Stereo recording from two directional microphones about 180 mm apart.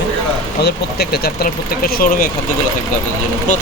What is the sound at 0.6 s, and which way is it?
Speech, 60° left (ahead or behind).